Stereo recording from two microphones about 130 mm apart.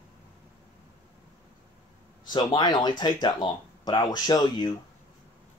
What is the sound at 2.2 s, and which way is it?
Speech, 35° left (ahead or behind).